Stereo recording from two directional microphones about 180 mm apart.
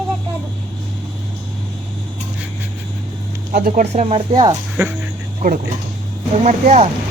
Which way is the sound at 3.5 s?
50° right (ahead or behind).